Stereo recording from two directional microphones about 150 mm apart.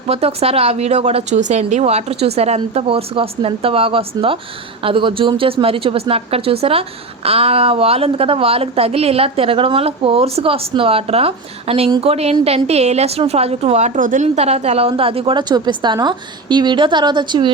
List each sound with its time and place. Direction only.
0.1 s a woman's voice: 40° right (ahead or behind)